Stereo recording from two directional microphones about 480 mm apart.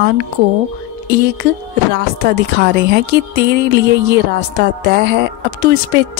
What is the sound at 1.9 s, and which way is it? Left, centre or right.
A woman's voice, centre.